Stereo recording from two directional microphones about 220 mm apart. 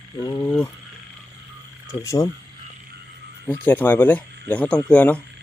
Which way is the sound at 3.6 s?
10° left (ahead or behind).